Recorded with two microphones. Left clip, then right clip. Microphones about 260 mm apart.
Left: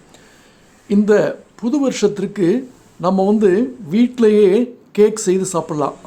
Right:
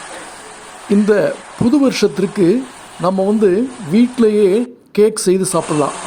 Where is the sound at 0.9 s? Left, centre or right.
Right.